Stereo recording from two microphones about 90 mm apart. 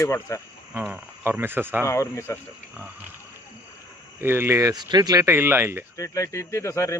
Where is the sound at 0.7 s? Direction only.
20° right (ahead or behind).